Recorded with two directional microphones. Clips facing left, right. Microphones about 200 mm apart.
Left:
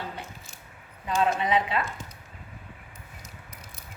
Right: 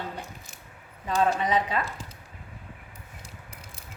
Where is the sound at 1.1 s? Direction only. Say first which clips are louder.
Even; 40° right (ahead or behind).